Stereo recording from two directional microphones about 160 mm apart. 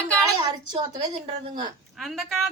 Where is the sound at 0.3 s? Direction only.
25° right (ahead or behind).